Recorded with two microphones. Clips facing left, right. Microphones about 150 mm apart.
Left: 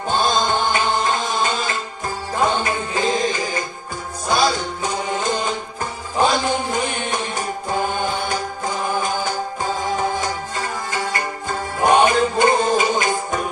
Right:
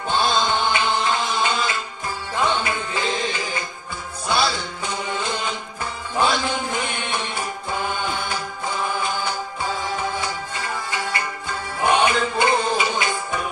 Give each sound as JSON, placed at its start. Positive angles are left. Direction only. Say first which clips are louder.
{"t": 0.1, "sound": "music", "louder": "left 2 dB", "side_deg": 45}